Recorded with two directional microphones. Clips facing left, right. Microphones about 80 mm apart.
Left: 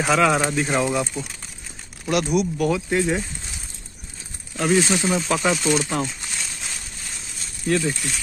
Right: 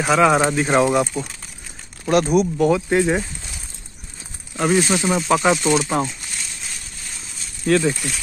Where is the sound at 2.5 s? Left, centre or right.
Right.